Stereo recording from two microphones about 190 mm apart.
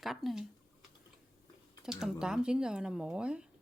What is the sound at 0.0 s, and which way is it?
Speech, centre (ahead or behind).